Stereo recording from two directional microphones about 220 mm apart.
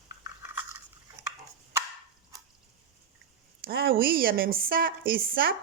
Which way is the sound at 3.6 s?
45° right (ahead or behind).